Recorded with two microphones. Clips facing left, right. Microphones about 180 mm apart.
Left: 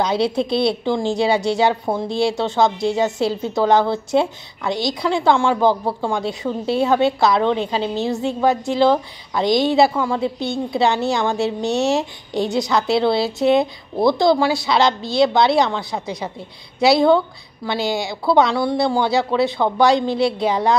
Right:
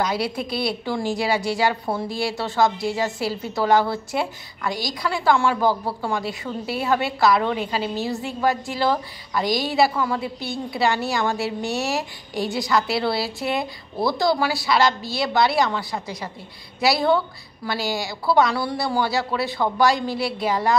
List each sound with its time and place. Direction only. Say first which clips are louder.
0.0 s a woman's voice: left 5 dB; 25° left (ahead or behind)